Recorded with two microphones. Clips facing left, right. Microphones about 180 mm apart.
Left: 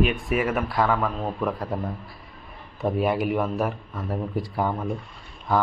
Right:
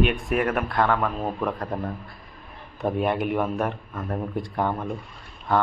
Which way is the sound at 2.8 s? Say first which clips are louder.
Left 1 dB; centre (ahead or behind).